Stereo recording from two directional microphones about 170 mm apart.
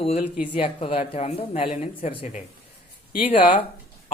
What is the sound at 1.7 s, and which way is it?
Speech, 45° left (ahead or behind).